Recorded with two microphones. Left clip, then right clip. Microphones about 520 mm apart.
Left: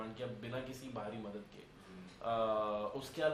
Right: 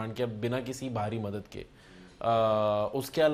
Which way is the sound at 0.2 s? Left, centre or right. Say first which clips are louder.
Right 14 dB; right.